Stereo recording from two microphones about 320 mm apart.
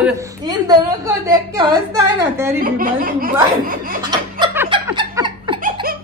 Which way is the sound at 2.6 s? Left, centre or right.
Right.